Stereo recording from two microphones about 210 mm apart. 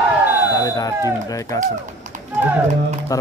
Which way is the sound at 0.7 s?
15° left (ahead or behind).